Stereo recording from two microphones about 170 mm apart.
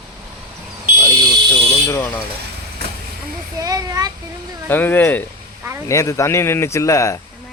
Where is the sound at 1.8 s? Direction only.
15° left (ahead or behind).